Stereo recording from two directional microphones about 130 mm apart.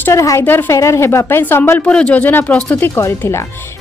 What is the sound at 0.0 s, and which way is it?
A woman's voice, 25° left (ahead or behind).